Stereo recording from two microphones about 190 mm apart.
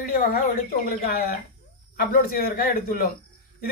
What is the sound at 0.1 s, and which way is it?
Speech, 50° left (ahead or behind).